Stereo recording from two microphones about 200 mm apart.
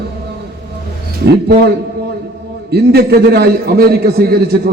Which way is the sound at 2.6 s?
55° right (ahead or behind).